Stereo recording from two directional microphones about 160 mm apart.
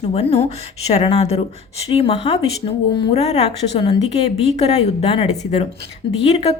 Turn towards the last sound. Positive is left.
turn(degrees=40)  # may be behind; listen again after turning